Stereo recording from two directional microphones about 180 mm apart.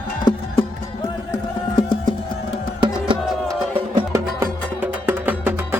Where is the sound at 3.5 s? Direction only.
15° right (ahead or behind).